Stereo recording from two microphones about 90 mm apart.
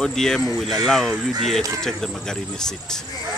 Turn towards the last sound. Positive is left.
turn(degrees=5)  # may be behind; listen again after turning